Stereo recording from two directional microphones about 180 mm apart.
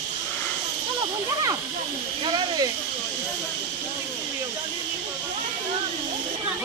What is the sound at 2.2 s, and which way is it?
Speech, 25° right (ahead or behind).